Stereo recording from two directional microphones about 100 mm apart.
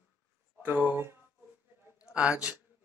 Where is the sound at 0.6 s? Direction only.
20° right (ahead or behind).